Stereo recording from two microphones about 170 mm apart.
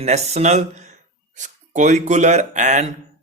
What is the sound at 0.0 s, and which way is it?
A man's voice, 40° right (ahead or behind).